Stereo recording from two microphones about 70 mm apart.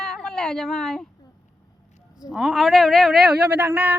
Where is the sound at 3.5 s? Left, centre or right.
Right.